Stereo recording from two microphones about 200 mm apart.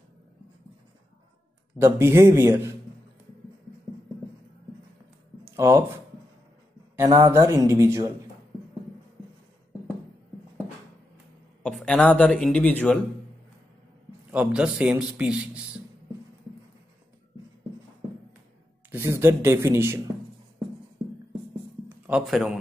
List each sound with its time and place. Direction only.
1.8 s speech: 15° right (ahead or behind)
5.4 s a sound: 15° right (ahead or behind)
7.0 s speech: 15° right (ahead or behind)
11.6 s speech: 5° left (ahead or behind)
14.3 s a man's voice: 5° right (ahead or behind)
18.9 s speech: 10° right (ahead or behind)
21.8 s a sound: 5° right (ahead or behind)